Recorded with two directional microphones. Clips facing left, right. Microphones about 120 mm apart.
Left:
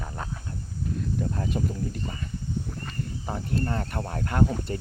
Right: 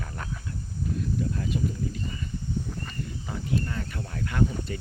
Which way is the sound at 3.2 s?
40° left (ahead or behind).